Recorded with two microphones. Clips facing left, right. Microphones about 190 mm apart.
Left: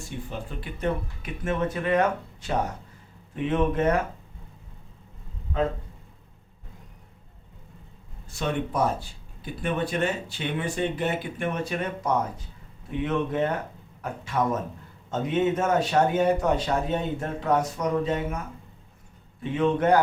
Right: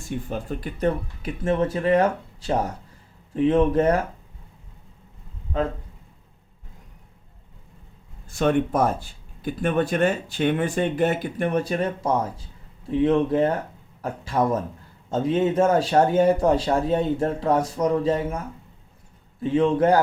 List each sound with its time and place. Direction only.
0.3 s speech: 45° right (ahead or behind)
8.4 s speech: 50° right (ahead or behind); by 18.3 s 30° right (ahead or behind)
19.4 s speech: 30° right (ahead or behind)